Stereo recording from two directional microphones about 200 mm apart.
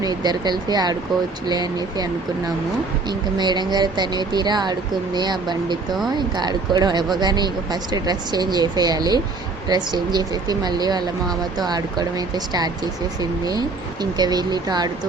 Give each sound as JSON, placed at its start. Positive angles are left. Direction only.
{"t": 0.0, "sound": "speech", "side_deg": -20}
{"t": 3.1, "sound": "speech", "side_deg": -20}